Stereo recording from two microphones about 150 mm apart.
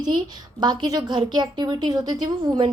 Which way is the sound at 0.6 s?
30° right (ahead or behind).